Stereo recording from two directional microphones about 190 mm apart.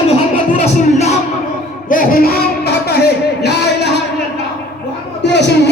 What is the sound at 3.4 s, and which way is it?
Music, 65° left (ahead or behind).